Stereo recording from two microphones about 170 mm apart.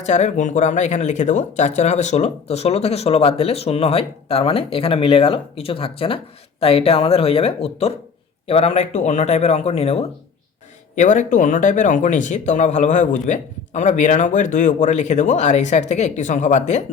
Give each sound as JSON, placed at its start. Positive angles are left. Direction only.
{"t": 0.0, "sound": "speech", "side_deg": 45}